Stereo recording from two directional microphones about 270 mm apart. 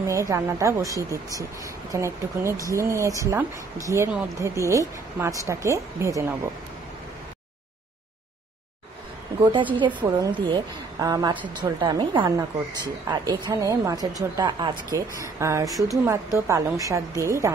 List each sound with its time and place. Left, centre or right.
0.0 s a woman's voice: centre
9.4 s a woman's voice: centre